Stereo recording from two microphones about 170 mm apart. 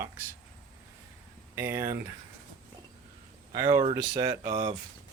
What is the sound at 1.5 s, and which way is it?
Speech, 15° right (ahead or behind).